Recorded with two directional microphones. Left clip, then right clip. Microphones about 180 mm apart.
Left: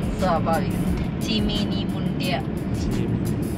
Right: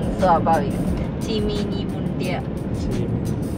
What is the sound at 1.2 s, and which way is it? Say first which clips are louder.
Speech: right 1 dB; 55° right (ahead or behind).